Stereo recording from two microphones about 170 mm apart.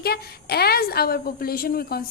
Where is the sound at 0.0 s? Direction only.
70° left (ahead or behind).